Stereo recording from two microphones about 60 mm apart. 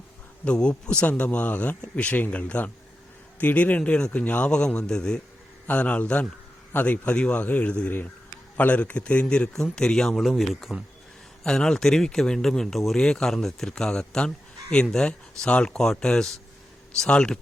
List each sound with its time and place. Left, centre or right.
0.4 s speech: centre
5.6 s speech: left; by 10.8 s centre
11.4 s speech: centre